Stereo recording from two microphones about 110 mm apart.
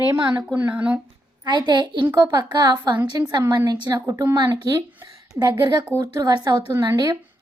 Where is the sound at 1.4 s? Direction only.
45° right (ahead or behind).